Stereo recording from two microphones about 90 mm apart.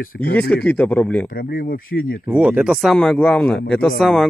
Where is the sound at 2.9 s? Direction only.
10° left (ahead or behind).